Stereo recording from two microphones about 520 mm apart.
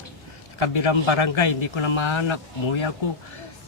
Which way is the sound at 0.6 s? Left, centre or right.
Left.